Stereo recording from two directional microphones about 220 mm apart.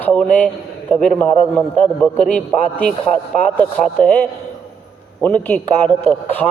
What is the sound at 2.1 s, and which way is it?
Speech, 35° left (ahead or behind).